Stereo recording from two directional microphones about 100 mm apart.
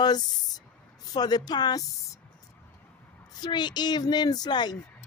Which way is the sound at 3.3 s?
45° left (ahead or behind).